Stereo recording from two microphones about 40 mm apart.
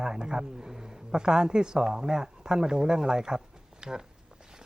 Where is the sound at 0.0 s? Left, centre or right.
Centre.